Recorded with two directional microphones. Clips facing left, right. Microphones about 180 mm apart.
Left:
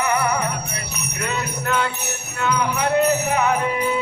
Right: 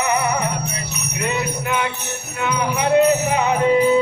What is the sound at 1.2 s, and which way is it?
Jingle bell, 15° right (ahead or behind).